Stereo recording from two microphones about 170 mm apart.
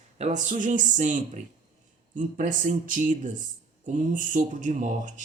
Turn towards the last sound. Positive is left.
turn(degrees=-45)  # may be behind; listen again after turning